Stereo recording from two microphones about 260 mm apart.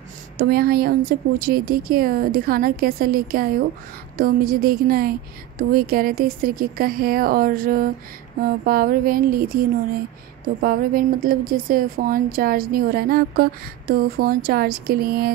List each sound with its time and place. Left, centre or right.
0.4 s a woman's voice: right